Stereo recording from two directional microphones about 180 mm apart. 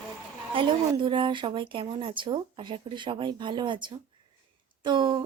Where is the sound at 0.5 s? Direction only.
25° right (ahead or behind).